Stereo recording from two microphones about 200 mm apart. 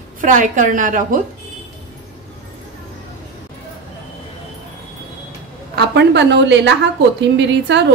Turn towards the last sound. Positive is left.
turn(degrees=-60)  # may be behind; listen again after turning